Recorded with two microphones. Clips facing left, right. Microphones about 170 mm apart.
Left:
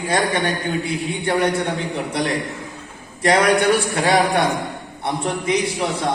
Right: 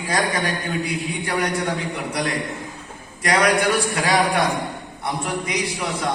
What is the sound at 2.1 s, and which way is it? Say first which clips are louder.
A man's voice: left 1 dB; 25° left (ahead or behind).